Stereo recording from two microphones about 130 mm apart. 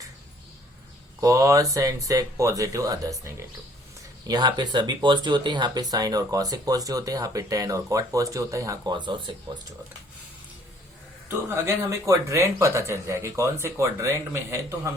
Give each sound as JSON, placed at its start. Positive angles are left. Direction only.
{"t": 1.2, "sound": "speech", "side_deg": -25}
{"t": 11.3, "sound": "speech", "side_deg": -20}